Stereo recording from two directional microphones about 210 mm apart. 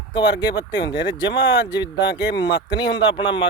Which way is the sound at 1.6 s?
20° left (ahead or behind).